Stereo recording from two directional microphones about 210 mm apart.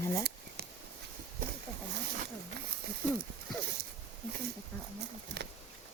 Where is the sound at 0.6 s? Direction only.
50° right (ahead or behind).